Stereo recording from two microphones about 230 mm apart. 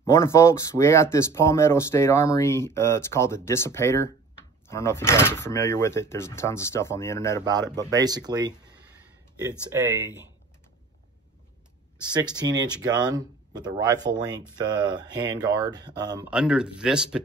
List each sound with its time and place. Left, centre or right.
0.0 s speech: centre
7.7 s speech: centre
12.1 s speech: centre
16.3 s speech: centre